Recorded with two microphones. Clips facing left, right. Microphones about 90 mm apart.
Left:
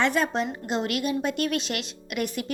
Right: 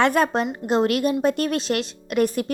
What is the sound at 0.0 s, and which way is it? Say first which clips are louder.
A woman's voice: right 5 dB; 50° right (ahead or behind).